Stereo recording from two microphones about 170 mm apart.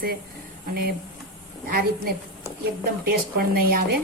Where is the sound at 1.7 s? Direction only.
60° right (ahead or behind).